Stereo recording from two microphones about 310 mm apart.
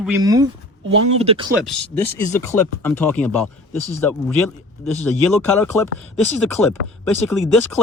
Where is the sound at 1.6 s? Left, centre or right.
Centre.